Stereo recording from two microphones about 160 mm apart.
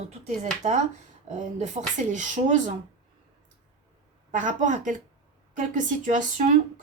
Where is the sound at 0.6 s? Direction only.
50° right (ahead or behind).